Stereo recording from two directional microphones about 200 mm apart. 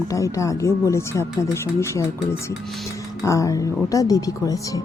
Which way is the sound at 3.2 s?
15° left (ahead or behind).